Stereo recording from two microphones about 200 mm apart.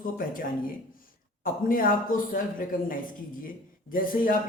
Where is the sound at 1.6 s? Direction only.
45° left (ahead or behind).